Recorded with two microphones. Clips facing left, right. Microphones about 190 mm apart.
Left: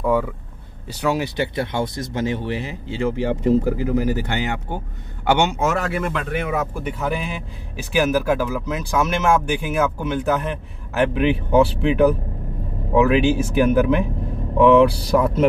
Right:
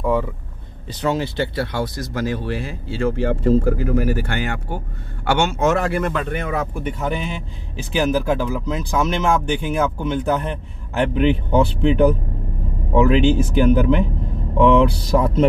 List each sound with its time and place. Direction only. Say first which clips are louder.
0.0 s a sound: even; 5° left (ahead or behind)
1.0 s speech: even; 15° left (ahead or behind)
5.6 s speech: right 3 dB; centre (ahead or behind)